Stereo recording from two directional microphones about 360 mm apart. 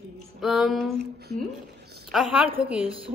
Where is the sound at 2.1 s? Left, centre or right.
Centre.